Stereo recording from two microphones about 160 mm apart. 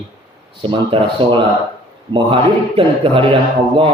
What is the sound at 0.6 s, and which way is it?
Speech, 30° right (ahead or behind).